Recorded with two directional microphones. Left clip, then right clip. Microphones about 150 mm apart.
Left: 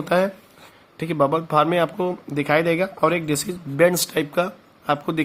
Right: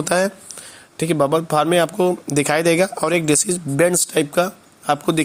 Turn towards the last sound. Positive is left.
turn(degrees=-30)  # may be behind; listen again after turning